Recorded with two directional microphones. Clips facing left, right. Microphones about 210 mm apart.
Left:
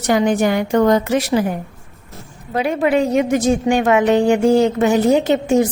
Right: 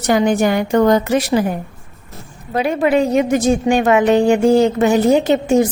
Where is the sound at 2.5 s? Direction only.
35° right (ahead or behind).